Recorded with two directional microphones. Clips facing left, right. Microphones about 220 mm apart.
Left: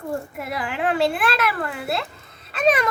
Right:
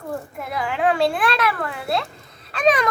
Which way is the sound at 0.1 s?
5° left (ahead or behind).